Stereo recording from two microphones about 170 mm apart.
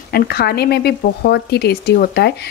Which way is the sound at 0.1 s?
65° left (ahead or behind).